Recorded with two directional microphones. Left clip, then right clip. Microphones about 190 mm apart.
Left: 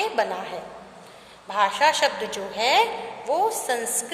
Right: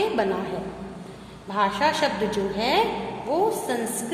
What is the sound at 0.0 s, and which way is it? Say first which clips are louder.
A woman's voice: right 1 dB; 30° left (ahead or behind).